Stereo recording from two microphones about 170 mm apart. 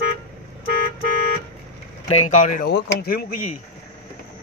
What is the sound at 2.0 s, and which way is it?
Speech, 40° left (ahead or behind).